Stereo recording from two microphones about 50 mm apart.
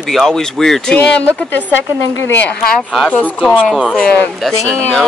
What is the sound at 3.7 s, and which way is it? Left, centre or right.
Speech, centre.